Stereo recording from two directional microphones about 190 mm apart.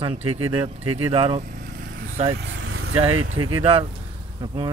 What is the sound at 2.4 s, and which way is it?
Vehicle, 90° right.